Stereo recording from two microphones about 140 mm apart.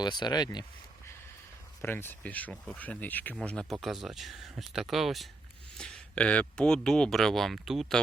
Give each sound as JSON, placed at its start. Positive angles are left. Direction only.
{"t": 0.0, "sound": "speech", "side_deg": 30}
{"t": 1.8, "sound": "speech", "side_deg": 15}